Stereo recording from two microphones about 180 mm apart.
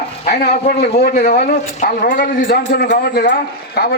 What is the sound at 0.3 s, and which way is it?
A man's voice, 60° left (ahead or behind).